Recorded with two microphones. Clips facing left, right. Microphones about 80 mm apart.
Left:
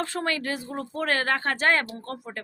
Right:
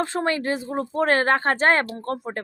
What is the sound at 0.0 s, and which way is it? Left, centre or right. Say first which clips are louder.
Speech: right 5 dB; right.